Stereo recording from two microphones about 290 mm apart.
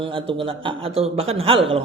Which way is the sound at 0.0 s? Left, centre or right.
Centre.